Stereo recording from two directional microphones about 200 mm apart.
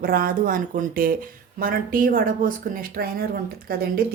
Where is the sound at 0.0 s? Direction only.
45° right (ahead or behind).